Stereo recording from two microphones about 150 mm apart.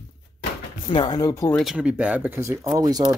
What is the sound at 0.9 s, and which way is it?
Speech, 30° left (ahead or behind).